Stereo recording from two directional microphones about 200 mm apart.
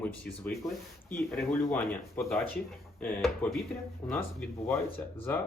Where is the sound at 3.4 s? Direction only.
10° left (ahead or behind).